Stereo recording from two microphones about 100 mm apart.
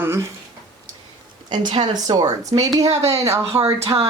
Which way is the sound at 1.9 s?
40° right (ahead or behind).